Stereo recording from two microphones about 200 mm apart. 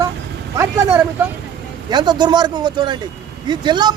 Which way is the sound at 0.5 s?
15° right (ahead or behind).